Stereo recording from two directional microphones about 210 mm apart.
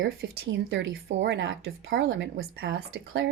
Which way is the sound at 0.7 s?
55° right (ahead or behind).